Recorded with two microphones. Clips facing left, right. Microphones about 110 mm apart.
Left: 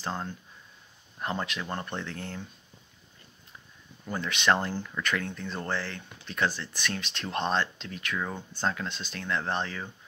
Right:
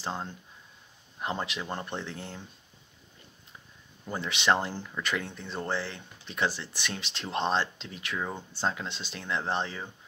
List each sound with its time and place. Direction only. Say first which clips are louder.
0.0 s speech: left 1 dB; 20° right (ahead or behind)
4.1 s speech: left 1 dB; 25° right (ahead or behind)